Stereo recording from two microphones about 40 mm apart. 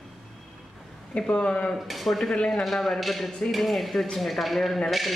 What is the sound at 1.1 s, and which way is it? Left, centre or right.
Speech, left.